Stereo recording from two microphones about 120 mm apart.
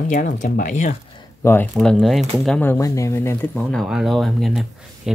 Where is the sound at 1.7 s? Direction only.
5° left (ahead or behind).